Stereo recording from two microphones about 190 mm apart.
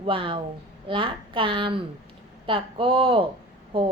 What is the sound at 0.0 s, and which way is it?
A woman's voice, 25° right (ahead or behind).